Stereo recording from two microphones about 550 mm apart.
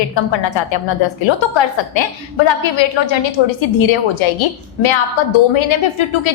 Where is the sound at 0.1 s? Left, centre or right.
Left.